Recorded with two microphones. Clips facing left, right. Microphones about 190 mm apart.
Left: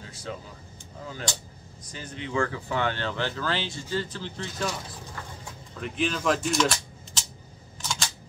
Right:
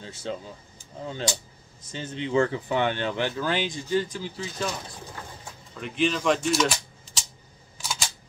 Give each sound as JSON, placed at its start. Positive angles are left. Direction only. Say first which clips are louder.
{"t": 0.0, "sound": "speech", "louder": "right 4 dB", "side_deg": -25}
{"t": 1.9, "sound": "speech", "louder": "right 6 dB", "side_deg": -25}
{"t": 5.8, "sound": "speech", "louder": "right 3 dB", "side_deg": 0}
{"t": 7.8, "sound": "camera", "louder": "even", "side_deg": -10}